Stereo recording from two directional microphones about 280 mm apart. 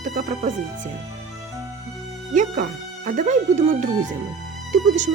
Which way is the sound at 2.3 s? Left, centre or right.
Right.